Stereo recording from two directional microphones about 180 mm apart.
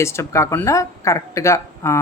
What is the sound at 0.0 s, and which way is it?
A woman's voice, 15° left (ahead or behind).